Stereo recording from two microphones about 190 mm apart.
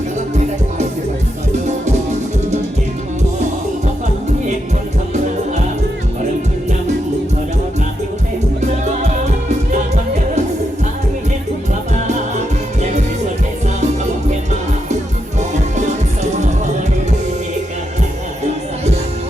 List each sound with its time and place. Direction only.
8.6 s music: 40° right (ahead or behind)
13.8 s music: 35° right (ahead or behind)